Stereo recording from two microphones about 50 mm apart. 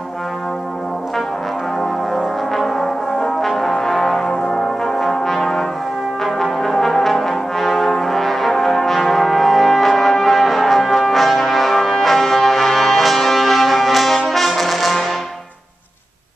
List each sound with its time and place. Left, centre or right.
1.8 s brass instrument: centre